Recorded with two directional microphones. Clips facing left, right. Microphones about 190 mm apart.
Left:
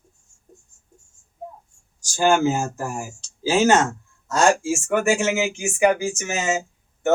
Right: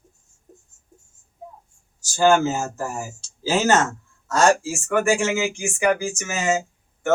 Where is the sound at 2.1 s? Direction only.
15° left (ahead or behind).